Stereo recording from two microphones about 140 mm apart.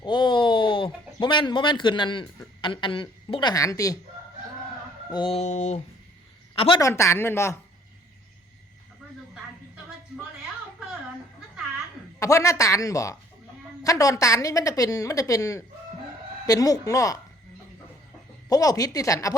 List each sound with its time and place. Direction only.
0.0 s a sound: 35° left (ahead or behind)
2.6 s a woman's voice: 35° left (ahead or behind)
3.5 s a woman's voice: 25° left (ahead or behind)
5.1 s fowl: 35° left (ahead or behind)
5.4 s a sound: 55° left (ahead or behind)
6.7 s a woman's voice: 20° left (ahead or behind)
12.2 s a woman's voice: 20° left (ahead or behind)
18.4 s a woman's voice: 25° left (ahead or behind)